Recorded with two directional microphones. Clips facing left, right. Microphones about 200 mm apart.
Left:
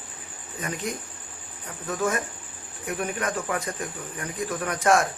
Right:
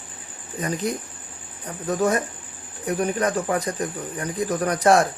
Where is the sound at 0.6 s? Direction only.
35° right (ahead or behind).